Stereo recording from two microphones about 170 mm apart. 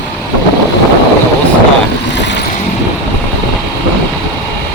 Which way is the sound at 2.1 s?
90° left.